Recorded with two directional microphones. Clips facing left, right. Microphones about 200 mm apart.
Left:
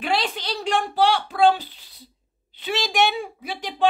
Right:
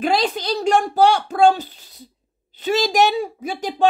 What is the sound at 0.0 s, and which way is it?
Speech, 40° right (ahead or behind).